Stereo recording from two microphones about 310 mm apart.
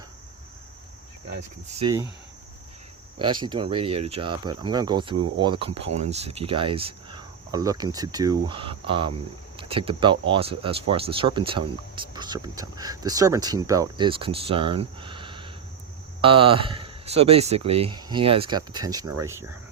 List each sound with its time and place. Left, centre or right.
1.3 s speech: right
3.2 s speech: centre